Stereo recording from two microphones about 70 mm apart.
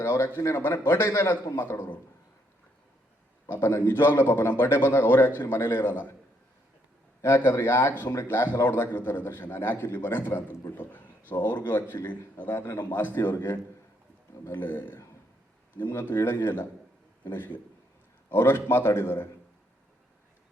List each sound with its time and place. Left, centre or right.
0.0 s a man's voice: left
3.4 s a man's voice: left
7.2 s a man's voice: left
18.3 s a man's voice: left